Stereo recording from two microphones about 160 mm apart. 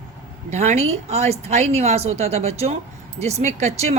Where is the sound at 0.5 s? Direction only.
45° right (ahead or behind).